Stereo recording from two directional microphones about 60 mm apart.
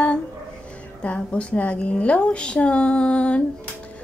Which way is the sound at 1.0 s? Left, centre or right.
Centre.